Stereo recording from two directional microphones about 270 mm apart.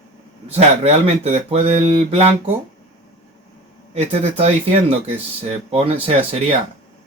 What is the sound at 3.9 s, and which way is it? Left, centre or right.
Speech, right.